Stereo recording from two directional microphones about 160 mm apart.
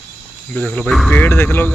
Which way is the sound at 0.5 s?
10° left (ahead or behind).